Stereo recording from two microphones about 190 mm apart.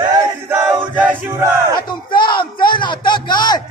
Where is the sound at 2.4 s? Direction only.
25° left (ahead or behind).